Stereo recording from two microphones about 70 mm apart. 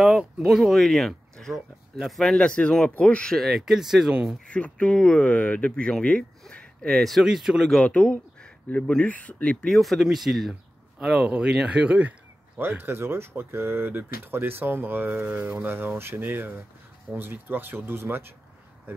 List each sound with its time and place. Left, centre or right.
0.5 s speech: centre
2.3 s speech: centre
3.3 s speech: centre
4.5 s speech: centre
6.5 s a sound: centre
6.9 s speech: centre
7.2 s speech: centre
7.8 s speech: centre
9.8 s speech: centre
11.2 s speech: right
12.5 s speech: right
17.1 s speech: centre
17.5 s speech: right